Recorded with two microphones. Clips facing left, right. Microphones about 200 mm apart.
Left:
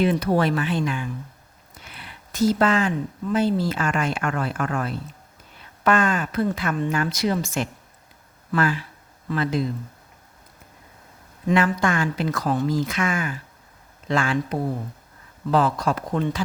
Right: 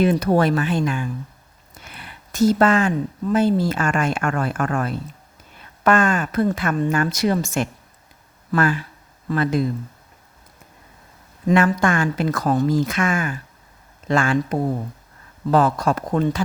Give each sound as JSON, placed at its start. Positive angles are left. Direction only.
{"t": 0.0, "sound": "speech", "side_deg": -45}
{"t": 11.4, "sound": "speech", "side_deg": -45}